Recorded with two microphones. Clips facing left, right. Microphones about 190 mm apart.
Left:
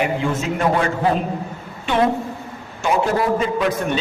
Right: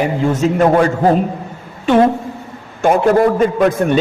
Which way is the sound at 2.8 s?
50° right (ahead or behind).